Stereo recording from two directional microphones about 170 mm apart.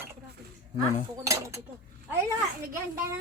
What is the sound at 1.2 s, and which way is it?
Cutlery, 15° right (ahead or behind).